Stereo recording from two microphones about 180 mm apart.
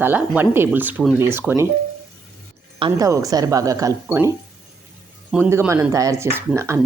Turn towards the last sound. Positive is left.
turn(degrees=-15)  # may be behind; listen again after turning